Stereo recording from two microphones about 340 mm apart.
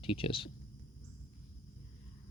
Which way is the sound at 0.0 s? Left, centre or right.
Centre.